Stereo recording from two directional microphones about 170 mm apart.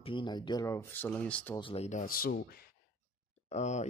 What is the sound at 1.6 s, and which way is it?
Speech, 35° left (ahead or behind).